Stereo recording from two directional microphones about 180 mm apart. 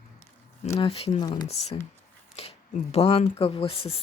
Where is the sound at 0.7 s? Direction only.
30° left (ahead or behind).